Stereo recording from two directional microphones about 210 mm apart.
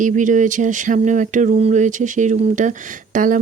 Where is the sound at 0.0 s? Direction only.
35° right (ahead or behind).